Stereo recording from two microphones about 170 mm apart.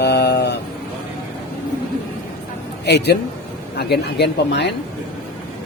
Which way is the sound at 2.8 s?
75° left (ahead or behind).